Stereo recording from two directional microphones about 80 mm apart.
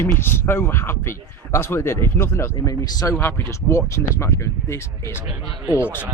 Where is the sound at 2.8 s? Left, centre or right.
Left.